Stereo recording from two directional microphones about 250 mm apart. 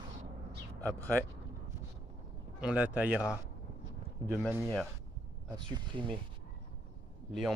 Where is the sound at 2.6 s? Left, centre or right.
Centre.